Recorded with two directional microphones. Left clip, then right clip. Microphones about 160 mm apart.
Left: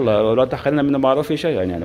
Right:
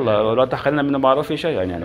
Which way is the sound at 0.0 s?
90° left.